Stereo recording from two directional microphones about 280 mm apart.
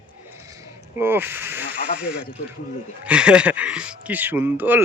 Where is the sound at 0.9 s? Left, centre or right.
Centre.